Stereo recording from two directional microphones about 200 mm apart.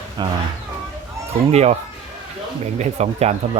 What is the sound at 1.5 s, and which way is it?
Speech, 35° right (ahead or behind).